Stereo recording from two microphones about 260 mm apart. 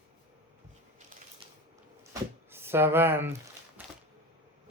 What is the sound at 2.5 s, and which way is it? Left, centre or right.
Speech, centre.